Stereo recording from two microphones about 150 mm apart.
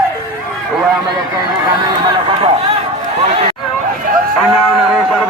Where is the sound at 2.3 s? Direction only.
40° right (ahead or behind).